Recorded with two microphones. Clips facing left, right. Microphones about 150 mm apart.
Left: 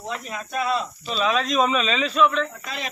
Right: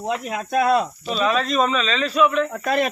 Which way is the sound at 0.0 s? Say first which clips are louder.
Right 6 dB; 55° right (ahead or behind).